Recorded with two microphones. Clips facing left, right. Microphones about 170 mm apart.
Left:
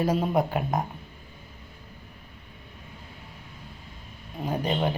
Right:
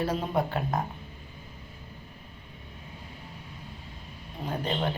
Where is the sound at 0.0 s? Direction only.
10° left (ahead or behind).